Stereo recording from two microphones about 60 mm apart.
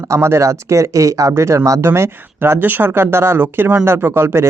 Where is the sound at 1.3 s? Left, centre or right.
Right.